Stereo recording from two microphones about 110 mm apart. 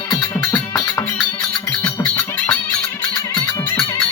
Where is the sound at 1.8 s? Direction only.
15° left (ahead or behind).